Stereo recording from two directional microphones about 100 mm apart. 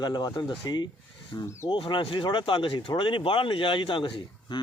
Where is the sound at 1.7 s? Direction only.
55° left (ahead or behind).